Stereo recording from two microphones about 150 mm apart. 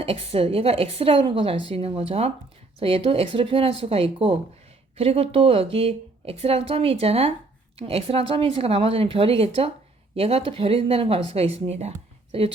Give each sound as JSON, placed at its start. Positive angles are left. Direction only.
{"t": 0.0, "sound": "a woman's voice", "side_deg": -40}